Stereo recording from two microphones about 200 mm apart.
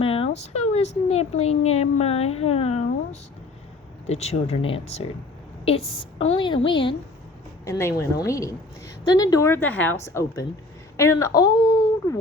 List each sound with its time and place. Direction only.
0.0 s a sound: 30° left (ahead or behind)
0.7 s a woman's voice: 35° left (ahead or behind)
7.6 s a woman's voice: 15° left (ahead or behind)